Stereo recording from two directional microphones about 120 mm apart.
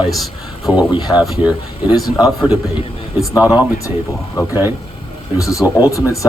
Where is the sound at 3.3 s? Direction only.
15° right (ahead or behind).